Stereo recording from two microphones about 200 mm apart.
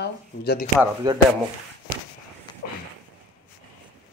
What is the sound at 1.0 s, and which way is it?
Speech, 20° right (ahead or behind).